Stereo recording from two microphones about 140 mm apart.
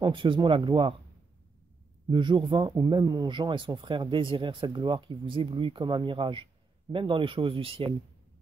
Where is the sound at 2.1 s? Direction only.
35° right (ahead or behind).